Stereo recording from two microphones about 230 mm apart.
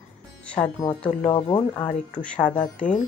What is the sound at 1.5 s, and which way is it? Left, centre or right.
Speech, centre.